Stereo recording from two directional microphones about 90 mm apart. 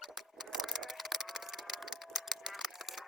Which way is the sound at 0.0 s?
5° right (ahead or behind).